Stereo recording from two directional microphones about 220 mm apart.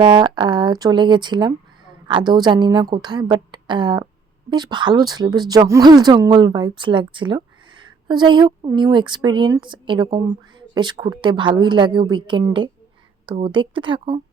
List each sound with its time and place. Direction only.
0.0 s speech: 20° right (ahead or behind)